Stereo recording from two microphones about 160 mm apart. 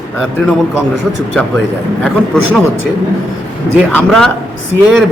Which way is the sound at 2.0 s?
5° left (ahead or behind).